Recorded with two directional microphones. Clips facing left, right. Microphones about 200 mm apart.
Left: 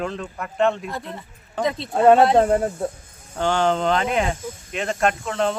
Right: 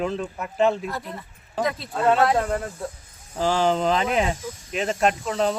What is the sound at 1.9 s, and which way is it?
Speech, 50° left (ahead or behind).